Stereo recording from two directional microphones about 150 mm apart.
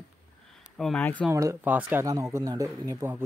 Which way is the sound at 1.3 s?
20° right (ahead or behind).